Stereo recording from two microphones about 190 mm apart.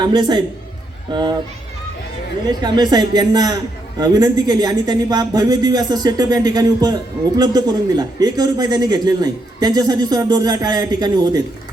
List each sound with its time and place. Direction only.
0.0 s a man's voice: 25° right (ahead or behind)
2.5 s a man's voice: 20° right (ahead or behind)